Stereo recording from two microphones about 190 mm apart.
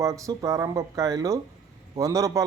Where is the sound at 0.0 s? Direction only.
15° right (ahead or behind).